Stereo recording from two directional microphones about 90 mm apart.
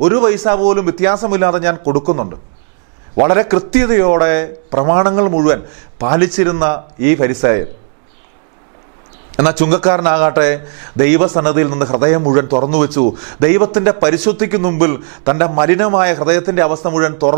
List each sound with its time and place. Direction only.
0.0 s a man's voice: 15° right (ahead or behind)
9.4 s a man's voice: 10° right (ahead or behind)